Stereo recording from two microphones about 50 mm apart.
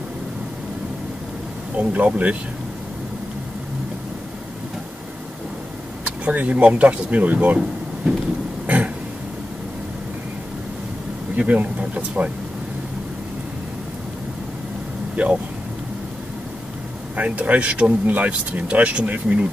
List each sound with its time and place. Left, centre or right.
1.8 s speech: right
6.0 s speech: right
8.6 s a sound: right
11.3 s speech: right
15.2 s speech: right
17.1 s speech: right